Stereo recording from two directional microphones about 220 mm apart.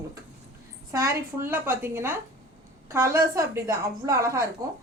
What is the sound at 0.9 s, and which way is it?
A woman's voice, 10° right (ahead or behind).